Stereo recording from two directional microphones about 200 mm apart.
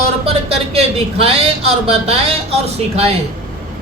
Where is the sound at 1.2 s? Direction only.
30° right (ahead or behind).